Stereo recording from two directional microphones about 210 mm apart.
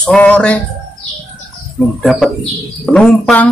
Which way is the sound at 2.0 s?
Centre (ahead or behind).